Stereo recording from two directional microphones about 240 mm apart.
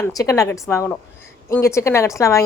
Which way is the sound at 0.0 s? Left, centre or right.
Centre.